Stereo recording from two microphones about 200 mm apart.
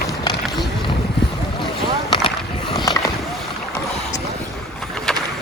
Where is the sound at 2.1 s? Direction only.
25° left (ahead or behind).